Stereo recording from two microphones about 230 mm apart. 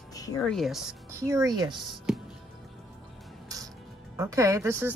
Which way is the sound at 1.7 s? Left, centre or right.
Centre.